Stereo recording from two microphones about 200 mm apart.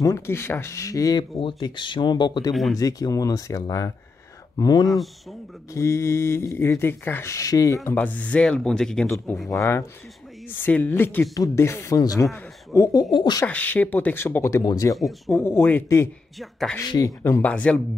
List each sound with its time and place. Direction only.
0.0 s speech: 15° left (ahead or behind)
2.5 s speech: centre (ahead or behind)
2.8 s speech: 15° left (ahead or behind)
9.5 s speech: 15° left (ahead or behind)
13.5 s speech: 10° left (ahead or behind)
15.0 s speech: centre (ahead or behind)
15.3 s speech: 10° left (ahead or behind)
16.3 s speech: centre (ahead or behind)
16.7 s speech: 20° left (ahead or behind)